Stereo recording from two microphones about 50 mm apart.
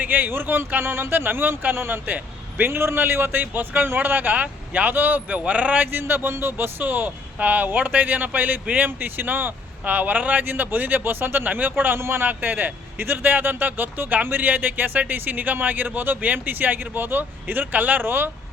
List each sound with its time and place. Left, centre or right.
0.0 s a man's voice: right
2.0 s vehicle: right
2.6 s a man's voice: right
3.4 s a man's voice: right
5.9 s a man's voice: right
11.9 s a man's voice: right
12.2 s a man's voice: right
18.0 s a man's voice: right